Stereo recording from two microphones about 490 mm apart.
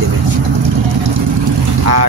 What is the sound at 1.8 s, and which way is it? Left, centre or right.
Speech, right.